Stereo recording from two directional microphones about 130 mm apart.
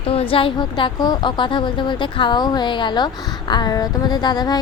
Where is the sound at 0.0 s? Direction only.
45° left (ahead or behind).